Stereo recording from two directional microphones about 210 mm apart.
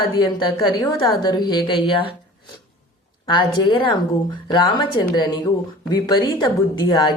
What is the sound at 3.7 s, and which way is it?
A woman's voice, 20° left (ahead or behind).